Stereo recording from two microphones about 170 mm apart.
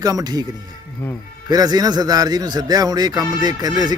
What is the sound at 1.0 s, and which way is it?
Speech, 15° left (ahead or behind).